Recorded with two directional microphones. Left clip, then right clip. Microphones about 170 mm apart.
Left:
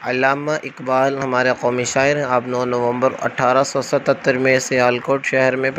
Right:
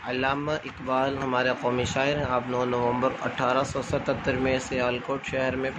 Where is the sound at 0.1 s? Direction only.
45° left (ahead or behind).